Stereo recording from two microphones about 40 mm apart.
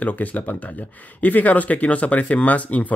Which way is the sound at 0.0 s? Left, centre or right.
Left.